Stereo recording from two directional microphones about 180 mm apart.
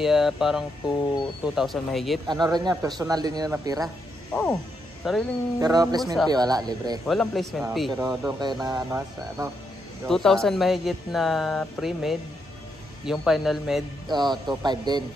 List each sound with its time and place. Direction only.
0.0 s speech: centre (ahead or behind)
2.4 s speech: 20° right (ahead or behind)
4.3 s speech: 10° left (ahead or behind)
5.1 s speech: centre (ahead or behind)
5.6 s speech: 20° right (ahead or behind)
7.1 s speech: centre (ahead or behind)
7.9 s speech: 20° right (ahead or behind)
10.0 s speech: 5° left (ahead or behind)
14.0 s speech: 25° right (ahead or behind)